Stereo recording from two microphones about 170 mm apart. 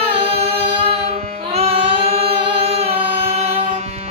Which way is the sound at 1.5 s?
35° right (ahead or behind).